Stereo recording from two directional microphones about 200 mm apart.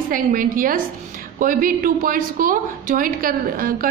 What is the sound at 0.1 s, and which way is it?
Speech, 45° right (ahead or behind).